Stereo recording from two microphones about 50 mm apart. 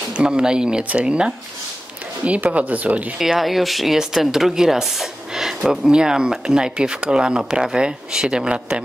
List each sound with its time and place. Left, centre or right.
0.2 s speech: centre
3.2 s speech: centre